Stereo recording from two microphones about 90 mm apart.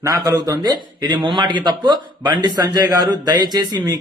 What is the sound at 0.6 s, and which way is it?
A man's voice, 55° right (ahead or behind).